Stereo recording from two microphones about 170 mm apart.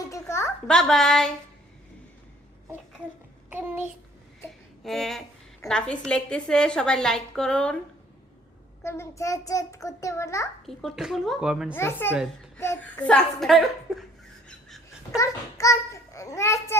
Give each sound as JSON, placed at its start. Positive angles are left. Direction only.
{"t": 0.0, "sound": "a sound", "side_deg": 15}
{"t": 0.7, "sound": "a woman's voice", "side_deg": 5}
{"t": 3.5, "sound": "a child's voice", "side_deg": -10}
{"t": 4.8, "sound": "a woman's voice", "side_deg": 0}
{"t": 8.8, "sound": "a child's voice", "side_deg": 15}
{"t": 10.7, "sound": "a woman's voice", "side_deg": 0}
{"t": 11.7, "sound": "a child's voice", "side_deg": 15}
{"t": 15.1, "sound": "a child's voice", "side_deg": 20}